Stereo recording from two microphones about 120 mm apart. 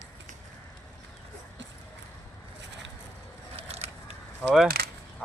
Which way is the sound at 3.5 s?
60° right (ahead or behind).